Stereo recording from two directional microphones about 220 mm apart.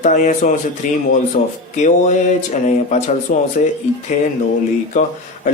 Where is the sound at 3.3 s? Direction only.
35° left (ahead or behind).